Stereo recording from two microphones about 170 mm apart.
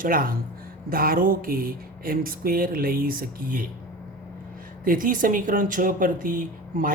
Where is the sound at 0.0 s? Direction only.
55° right (ahead or behind).